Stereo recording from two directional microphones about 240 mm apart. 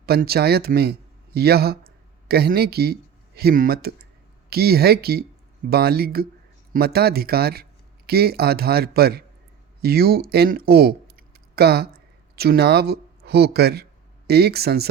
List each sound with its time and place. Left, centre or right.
0.0 s speech: right